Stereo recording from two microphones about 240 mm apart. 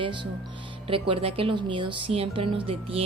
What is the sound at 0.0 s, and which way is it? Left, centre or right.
A woman's voice, centre.